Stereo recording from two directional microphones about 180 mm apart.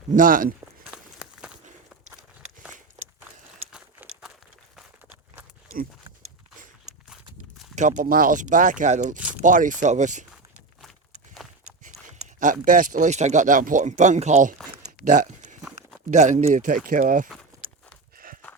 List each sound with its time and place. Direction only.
0.1 s speech: 50° right (ahead or behind)
0.9 s walk: 5° right (ahead or behind)
3.7 s a sound: 5° right (ahead or behind)
7.8 s speech: 45° right (ahead or behind)
12.0 s speech: 45° right (ahead or behind)
15.0 s a sound: 45° right (ahead or behind)
16.0 s speech: 40° right (ahead or behind)
17.5 s walk: 20° right (ahead or behind)
18.2 s a sound: 50° right (ahead or behind)